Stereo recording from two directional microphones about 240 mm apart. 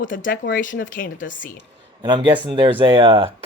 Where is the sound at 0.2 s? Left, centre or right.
Left.